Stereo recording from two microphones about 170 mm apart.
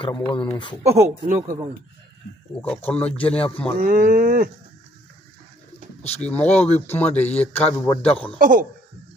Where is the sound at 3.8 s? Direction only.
55° right (ahead or behind).